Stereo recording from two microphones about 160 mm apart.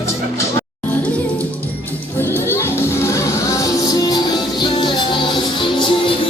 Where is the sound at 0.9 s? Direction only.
10° left (ahead or behind).